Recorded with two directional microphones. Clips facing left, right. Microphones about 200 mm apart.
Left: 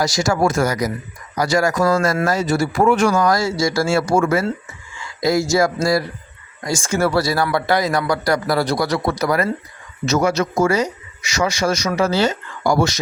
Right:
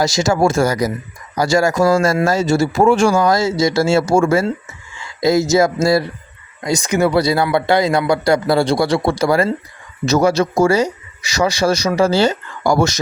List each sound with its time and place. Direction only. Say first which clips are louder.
0.0 s speech: right 3 dB; 25° right (ahead or behind); by 13.0 s 45° right (ahead or behind)